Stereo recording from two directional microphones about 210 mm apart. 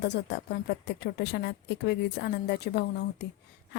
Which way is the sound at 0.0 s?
55° left (ahead or behind).